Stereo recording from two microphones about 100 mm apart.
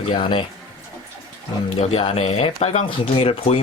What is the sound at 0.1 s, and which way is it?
Speech, 55° left (ahead or behind).